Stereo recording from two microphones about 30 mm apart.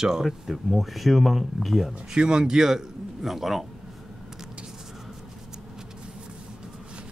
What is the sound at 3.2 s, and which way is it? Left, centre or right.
Speech, centre.